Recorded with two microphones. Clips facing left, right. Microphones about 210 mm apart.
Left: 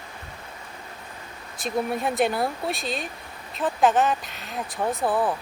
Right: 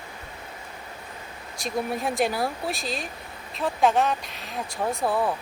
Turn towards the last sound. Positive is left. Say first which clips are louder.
# left 1 dB
turn(degrees=0)  # may be behind; listen again after turning